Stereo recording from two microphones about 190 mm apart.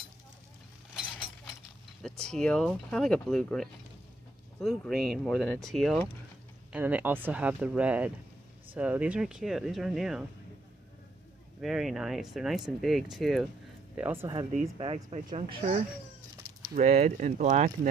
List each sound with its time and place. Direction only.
2.0 s speech: 5° left (ahead or behind)
11.6 s speech: centre (ahead or behind)
13.9 s speech: 10° right (ahead or behind)
14.8 s speech: 30° right (ahead or behind)